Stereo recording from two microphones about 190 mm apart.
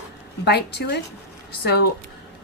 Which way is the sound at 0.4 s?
60° left (ahead or behind).